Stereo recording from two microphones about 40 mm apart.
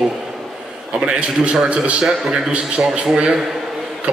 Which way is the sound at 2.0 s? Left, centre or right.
Centre.